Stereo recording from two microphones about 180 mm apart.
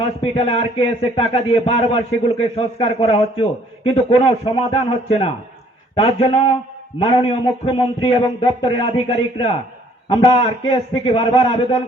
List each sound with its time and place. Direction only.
0.0 s speech: 35° left (ahead or behind)